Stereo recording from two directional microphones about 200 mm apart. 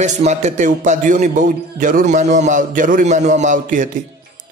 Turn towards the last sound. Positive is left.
turn(degrees=-40)  # may be behind; listen again after turning